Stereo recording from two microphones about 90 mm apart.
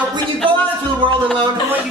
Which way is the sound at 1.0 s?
70° right (ahead or behind).